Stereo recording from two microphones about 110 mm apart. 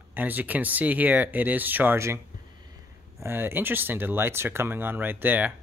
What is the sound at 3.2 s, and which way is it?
Speech, 20° right (ahead or behind).